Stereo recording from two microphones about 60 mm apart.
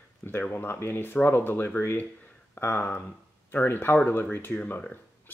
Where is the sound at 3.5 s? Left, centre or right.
Left.